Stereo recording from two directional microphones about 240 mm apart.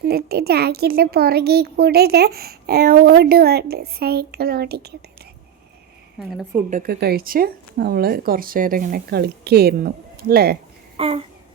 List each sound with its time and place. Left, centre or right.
0.1 s a child's voice: right
6.2 s a woman's voice: centre
6.7 s a child's voice: right
10.9 s a sound: right